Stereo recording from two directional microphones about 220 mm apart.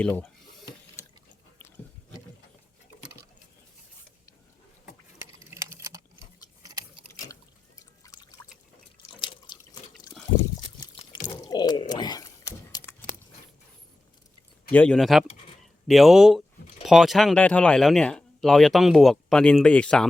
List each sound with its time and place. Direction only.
0.0 s speech: 5° left (ahead or behind)
5.5 s a sound: 15° right (ahead or behind)
8.0 s pour: 15° left (ahead or behind)
9.0 s drip: 20° left (ahead or behind)
10.8 s a sound: 20° left (ahead or behind)
14.7 s speech: 5° left (ahead or behind)